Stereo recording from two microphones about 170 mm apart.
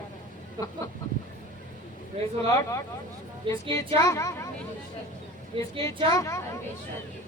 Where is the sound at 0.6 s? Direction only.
20° right (ahead or behind).